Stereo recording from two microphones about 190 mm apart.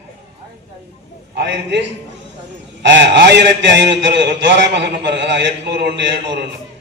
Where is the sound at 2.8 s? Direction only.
65° right (ahead or behind).